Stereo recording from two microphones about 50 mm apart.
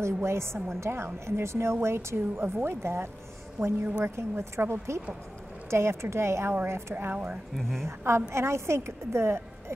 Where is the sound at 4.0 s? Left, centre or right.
Right.